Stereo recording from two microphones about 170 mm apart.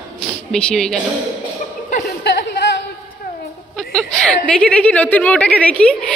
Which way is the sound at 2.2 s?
80° left.